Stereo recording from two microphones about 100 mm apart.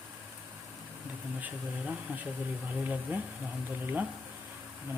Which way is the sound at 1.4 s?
15° right (ahead or behind).